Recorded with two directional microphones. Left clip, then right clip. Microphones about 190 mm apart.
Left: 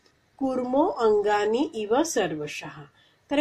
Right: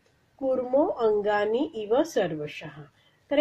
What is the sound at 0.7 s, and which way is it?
A woman's voice, 20° left (ahead or behind).